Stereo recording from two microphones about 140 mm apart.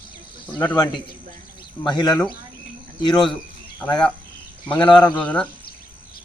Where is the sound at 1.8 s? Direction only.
30° left (ahead or behind).